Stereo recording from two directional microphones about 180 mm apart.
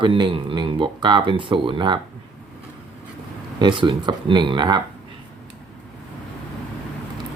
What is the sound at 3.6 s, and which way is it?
Speech, 25° right (ahead or behind).